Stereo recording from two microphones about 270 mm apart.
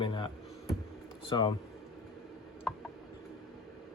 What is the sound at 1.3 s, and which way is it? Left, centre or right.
Speech, centre.